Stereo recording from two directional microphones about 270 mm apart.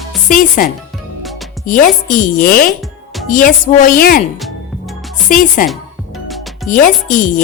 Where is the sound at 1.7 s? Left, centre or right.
Left.